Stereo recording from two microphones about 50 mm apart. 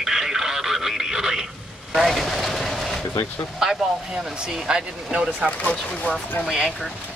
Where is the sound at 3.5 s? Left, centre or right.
Centre.